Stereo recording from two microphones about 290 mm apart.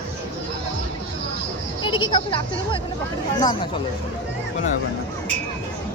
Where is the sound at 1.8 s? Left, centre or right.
Centre.